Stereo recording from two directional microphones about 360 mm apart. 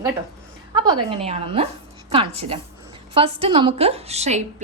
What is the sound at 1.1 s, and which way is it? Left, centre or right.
A woman's voice, centre.